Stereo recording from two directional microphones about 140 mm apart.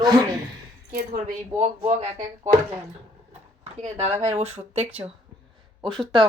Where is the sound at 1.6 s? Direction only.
50° right (ahead or behind).